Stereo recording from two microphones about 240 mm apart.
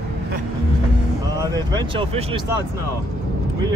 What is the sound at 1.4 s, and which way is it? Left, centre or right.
Speech, centre.